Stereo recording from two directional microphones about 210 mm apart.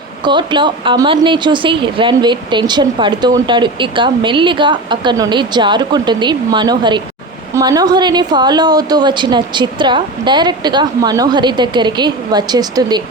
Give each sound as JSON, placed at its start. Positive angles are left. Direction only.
{"t": 0.3, "sound": "a woman's voice", "side_deg": -20}